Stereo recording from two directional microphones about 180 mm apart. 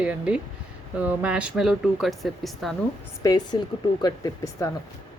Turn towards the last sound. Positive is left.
turn(degrees=20)  # may be behind; listen again after turning